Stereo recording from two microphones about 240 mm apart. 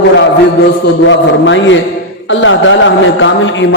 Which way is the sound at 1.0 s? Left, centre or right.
Left.